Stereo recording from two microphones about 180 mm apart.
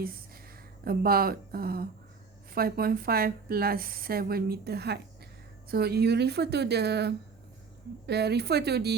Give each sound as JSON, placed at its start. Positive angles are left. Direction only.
{"t": 0.9, "sound": "a woman's voice", "side_deg": -55}